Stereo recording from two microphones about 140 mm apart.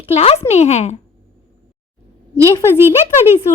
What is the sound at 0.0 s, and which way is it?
Speech, 45° left (ahead or behind).